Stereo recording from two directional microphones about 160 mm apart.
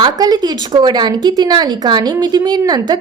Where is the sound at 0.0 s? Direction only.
25° right (ahead or behind).